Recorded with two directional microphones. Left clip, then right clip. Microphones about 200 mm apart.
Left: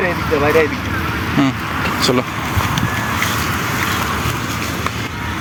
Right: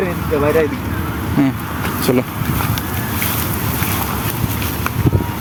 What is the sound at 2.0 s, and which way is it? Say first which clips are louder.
Speech: even; 20° right (ahead or behind).